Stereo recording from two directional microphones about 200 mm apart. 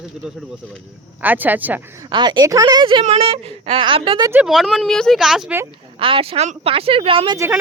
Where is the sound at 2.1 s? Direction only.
20° right (ahead or behind).